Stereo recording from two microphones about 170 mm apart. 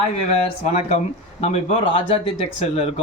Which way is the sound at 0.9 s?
40° left (ahead or behind).